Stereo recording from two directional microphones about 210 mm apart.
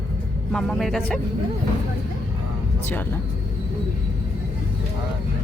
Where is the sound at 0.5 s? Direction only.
Centre (ahead or behind).